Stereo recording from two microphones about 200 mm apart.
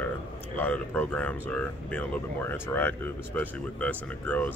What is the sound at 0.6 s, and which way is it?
Speech, 10° left (ahead or behind).